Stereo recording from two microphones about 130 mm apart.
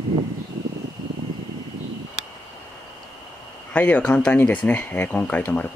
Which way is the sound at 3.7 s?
10° left (ahead or behind).